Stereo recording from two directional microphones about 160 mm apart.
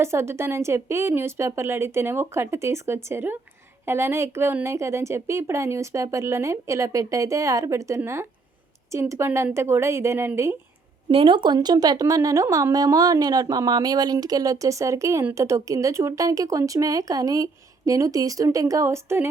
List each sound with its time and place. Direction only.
0.0 s a woman's voice: 15° right (ahead or behind)
11.1 s speech: 35° right (ahead or behind); by 19.3 s 15° right (ahead or behind)